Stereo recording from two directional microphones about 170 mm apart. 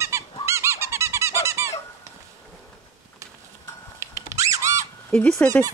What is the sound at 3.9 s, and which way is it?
Squeak, 20° right (ahead or behind).